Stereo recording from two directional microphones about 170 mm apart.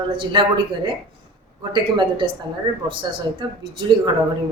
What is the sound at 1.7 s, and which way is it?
Speech, 30° right (ahead or behind).